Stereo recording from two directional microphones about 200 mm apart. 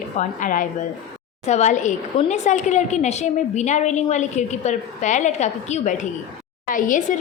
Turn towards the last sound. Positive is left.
turn(degrees=40)  # may be behind; listen again after turning